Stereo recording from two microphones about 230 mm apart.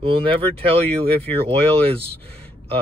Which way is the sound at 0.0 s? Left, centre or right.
Right.